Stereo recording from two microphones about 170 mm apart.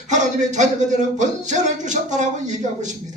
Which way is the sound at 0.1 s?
45° right (ahead or behind).